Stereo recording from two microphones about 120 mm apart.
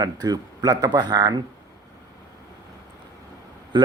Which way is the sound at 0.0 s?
35° right (ahead or behind).